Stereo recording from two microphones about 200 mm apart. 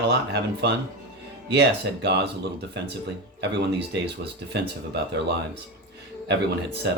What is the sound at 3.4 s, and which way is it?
Speech, 60° right (ahead or behind).